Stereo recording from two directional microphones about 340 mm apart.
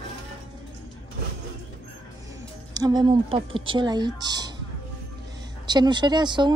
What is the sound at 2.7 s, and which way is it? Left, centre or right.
Speech, centre.